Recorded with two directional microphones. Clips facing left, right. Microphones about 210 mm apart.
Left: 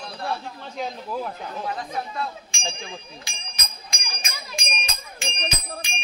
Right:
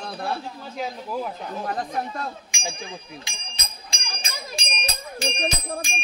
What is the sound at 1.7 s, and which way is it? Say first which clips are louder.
Speech: right 4 dB; 45° right (ahead or behind).